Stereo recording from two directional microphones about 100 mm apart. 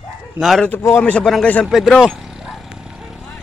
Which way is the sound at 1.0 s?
10° left (ahead or behind).